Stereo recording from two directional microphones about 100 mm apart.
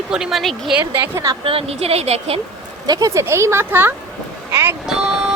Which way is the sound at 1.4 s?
75° right (ahead or behind).